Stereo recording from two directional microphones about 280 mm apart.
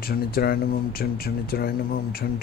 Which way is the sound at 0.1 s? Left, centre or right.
Left.